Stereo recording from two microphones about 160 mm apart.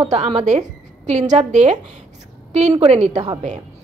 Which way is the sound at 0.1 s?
45° right (ahead or behind).